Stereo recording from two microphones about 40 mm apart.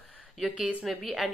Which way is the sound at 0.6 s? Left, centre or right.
Right.